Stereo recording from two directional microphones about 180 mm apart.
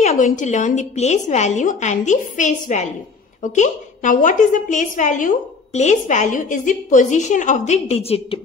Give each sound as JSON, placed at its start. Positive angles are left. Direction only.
{"t": 0.0, "sound": "a woman's voice", "side_deg": 40}